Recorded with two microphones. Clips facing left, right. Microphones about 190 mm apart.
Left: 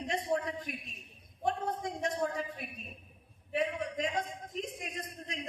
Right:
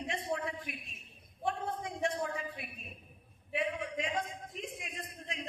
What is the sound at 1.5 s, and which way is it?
A man's voice, 40° left (ahead or behind).